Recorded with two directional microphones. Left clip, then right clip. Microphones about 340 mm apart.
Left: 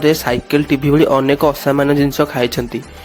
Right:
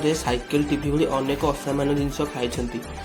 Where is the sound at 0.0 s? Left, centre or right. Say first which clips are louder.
Left 9 dB; left.